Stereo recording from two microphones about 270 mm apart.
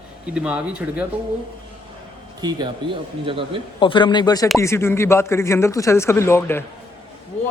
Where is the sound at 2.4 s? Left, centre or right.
Centre.